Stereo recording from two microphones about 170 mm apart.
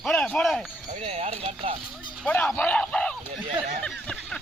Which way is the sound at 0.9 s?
40° right (ahead or behind).